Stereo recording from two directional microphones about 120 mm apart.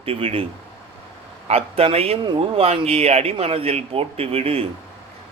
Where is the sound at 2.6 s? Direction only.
55° right (ahead or behind).